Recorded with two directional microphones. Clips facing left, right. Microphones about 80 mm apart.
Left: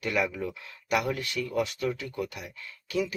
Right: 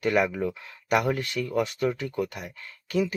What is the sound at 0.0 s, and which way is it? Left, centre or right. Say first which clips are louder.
Speech: right 5 dB; right.